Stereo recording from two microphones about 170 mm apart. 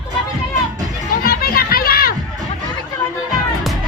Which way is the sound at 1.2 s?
60° left (ahead or behind).